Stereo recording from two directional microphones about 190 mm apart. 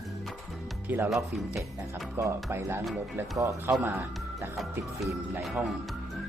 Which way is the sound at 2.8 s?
Centre (ahead or behind).